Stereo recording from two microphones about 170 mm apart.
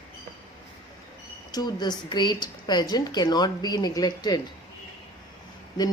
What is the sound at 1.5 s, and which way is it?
Speech, 25° left (ahead or behind).